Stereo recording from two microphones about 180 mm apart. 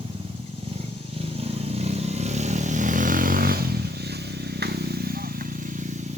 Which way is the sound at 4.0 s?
65° right (ahead or behind).